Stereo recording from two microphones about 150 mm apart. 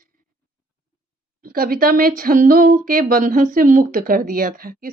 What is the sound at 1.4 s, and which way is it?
A woman's voice, 70° right (ahead or behind).